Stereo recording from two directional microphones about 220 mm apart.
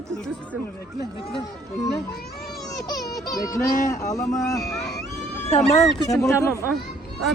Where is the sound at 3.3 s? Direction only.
15° left (ahead or behind).